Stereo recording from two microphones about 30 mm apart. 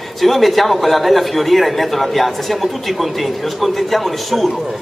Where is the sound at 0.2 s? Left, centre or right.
Centre.